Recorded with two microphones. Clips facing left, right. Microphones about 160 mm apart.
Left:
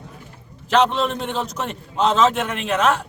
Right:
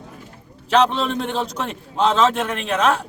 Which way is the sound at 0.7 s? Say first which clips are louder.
Even; centre (ahead or behind).